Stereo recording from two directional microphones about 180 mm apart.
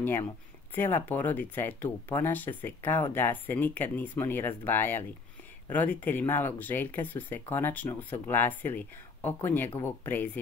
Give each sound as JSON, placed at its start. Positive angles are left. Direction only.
{"t": 0.7, "sound": "speech", "side_deg": 10}